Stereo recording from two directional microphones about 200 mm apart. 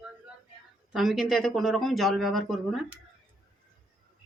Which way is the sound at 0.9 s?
Centre (ahead or behind).